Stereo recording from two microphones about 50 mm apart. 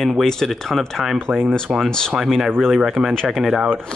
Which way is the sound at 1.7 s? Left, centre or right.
Centre.